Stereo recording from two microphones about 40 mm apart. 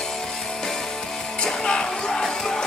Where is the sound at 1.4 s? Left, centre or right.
Centre.